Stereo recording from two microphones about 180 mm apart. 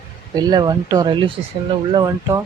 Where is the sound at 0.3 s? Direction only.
20° right (ahead or behind).